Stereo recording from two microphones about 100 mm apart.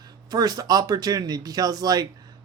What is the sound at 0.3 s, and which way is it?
Speech, 40° right (ahead or behind).